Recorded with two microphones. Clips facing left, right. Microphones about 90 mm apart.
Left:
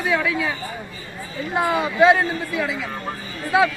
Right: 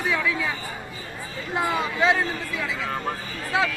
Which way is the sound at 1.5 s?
20° left (ahead or behind).